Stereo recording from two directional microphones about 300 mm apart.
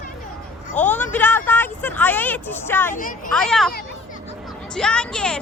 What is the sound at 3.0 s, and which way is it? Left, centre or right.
Speech, left.